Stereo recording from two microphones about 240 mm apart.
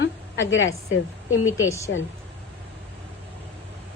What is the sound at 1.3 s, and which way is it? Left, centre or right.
Speech, centre.